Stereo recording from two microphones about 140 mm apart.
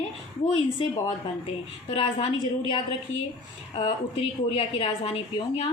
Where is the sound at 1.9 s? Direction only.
45° left (ahead or behind).